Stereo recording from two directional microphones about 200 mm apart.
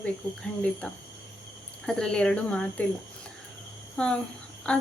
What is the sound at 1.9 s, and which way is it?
Speech, 5° left (ahead or behind).